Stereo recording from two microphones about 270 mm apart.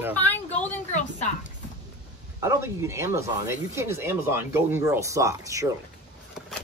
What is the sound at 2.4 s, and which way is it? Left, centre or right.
Speech, centre.